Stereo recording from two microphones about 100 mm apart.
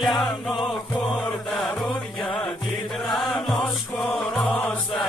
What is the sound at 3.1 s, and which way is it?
Music, centre (ahead or behind).